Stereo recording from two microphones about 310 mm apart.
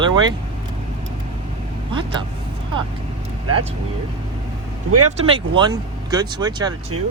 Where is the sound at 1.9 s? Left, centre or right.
Centre.